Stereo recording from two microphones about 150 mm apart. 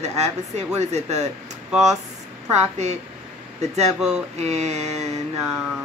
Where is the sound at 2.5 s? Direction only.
50° right (ahead or behind).